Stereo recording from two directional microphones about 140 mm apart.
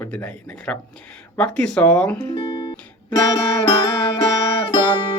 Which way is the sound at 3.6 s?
35° left (ahead or behind).